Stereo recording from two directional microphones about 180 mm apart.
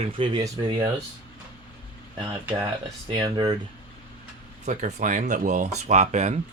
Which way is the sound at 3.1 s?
25° right (ahead or behind).